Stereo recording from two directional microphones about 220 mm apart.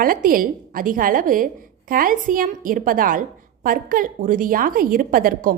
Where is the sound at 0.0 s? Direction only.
40° right (ahead or behind).